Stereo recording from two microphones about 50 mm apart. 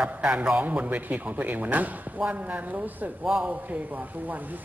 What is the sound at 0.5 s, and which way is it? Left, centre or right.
A man's voice, right.